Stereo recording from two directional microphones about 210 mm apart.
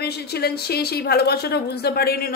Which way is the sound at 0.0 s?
50° left (ahead or behind).